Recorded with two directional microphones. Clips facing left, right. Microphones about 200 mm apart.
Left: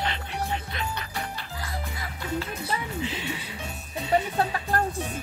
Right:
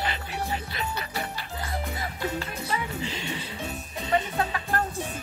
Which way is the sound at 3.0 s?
5° left (ahead or behind).